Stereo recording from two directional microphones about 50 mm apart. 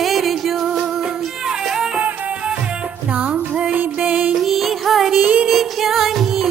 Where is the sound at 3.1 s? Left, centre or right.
Right.